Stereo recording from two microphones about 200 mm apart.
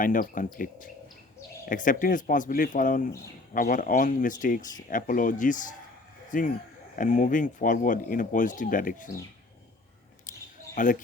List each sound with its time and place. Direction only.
0.0 s speech: 40° left (ahead or behind)
10.8 s speech: 40° left (ahead or behind)